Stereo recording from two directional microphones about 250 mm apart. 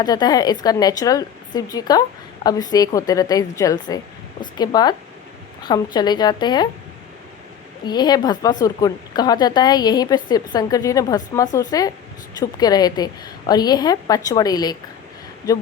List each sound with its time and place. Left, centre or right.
0.0 s speech: centre
7.9 s speech: centre